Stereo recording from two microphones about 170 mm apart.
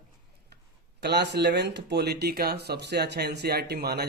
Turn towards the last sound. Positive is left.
turn(degrees=-70)  # may be behind; listen again after turning